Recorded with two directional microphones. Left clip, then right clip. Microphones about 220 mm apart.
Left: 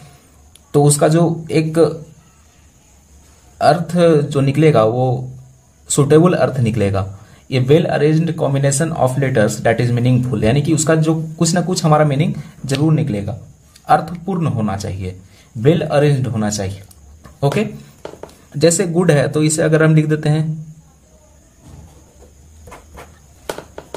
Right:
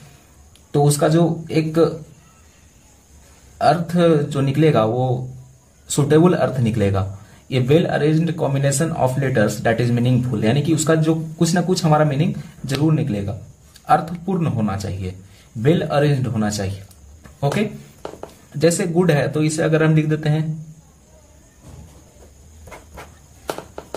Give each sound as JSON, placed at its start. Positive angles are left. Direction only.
{"t": 0.8, "sound": "a man's voice", "side_deg": 15}
{"t": 3.5, "sound": "a man's voice", "side_deg": 15}
{"t": 18.5, "sound": "speech", "side_deg": 20}